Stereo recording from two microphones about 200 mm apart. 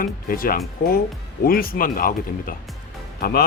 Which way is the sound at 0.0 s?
45° left (ahead or behind).